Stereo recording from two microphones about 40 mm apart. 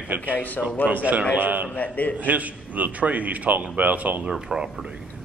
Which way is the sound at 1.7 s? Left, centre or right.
Left.